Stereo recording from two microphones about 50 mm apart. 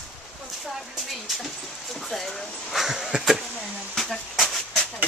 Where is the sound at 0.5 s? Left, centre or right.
Centre.